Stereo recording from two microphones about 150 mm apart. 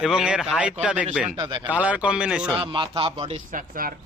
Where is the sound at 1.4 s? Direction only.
30° right (ahead or behind).